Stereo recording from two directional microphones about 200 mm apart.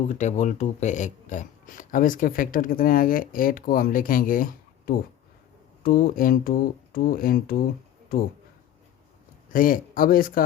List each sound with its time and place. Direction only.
0.0 s speech: 35° left (ahead or behind)
9.5 s speech: 45° left (ahead or behind)